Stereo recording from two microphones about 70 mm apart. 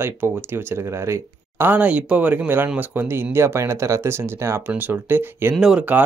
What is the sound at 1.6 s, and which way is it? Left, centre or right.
Speech, right.